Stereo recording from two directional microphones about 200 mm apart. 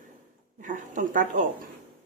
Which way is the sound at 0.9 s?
40° right (ahead or behind).